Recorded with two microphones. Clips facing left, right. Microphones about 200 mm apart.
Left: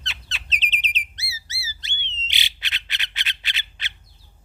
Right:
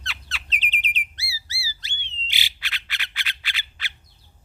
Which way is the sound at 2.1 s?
20° left (ahead or behind).